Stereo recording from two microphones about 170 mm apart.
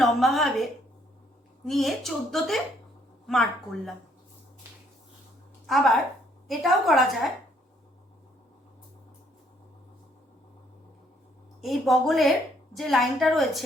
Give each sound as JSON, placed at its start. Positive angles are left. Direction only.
{"t": 0.0, "sound": "a woman's voice", "side_deg": 0}
{"t": 5.6, "sound": "a woman's voice", "side_deg": 0}
{"t": 11.6, "sound": "a woman's voice", "side_deg": 0}